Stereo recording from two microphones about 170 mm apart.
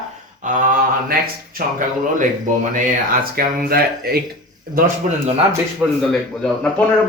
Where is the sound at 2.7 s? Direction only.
55° right (ahead or behind).